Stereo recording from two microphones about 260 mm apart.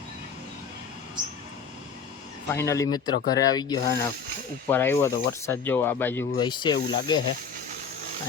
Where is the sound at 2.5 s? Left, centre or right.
Centre.